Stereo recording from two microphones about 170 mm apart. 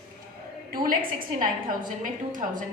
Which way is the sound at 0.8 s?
55° right (ahead or behind).